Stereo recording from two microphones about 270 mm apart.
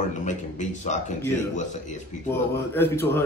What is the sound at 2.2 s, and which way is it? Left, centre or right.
Speech, centre.